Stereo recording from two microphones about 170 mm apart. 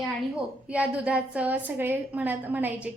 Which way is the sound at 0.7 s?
5° right (ahead or behind).